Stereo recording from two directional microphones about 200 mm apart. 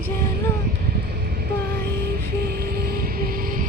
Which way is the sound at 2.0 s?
50° right (ahead or behind).